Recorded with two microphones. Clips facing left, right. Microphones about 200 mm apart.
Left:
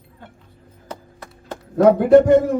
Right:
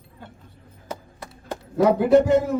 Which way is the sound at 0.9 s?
10° right (ahead or behind).